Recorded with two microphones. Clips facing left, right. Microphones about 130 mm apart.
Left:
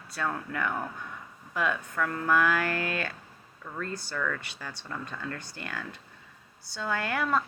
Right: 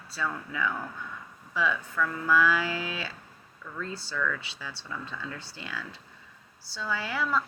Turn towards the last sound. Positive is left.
turn(degrees=55)  # may be behind; listen again after turning